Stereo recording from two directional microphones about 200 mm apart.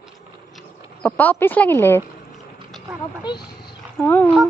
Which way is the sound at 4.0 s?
10° left (ahead or behind).